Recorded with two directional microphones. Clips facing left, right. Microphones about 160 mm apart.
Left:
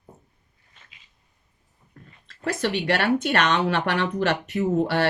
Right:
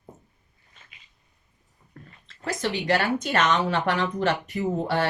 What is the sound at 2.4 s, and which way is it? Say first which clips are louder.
Speech: left 3 dB; 60° left (ahead or behind).